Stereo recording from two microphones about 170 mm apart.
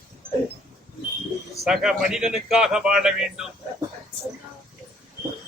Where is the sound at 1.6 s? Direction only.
5° right (ahead or behind).